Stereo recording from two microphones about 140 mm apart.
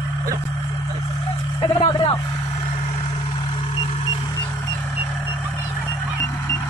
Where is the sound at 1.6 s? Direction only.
35° left (ahead or behind).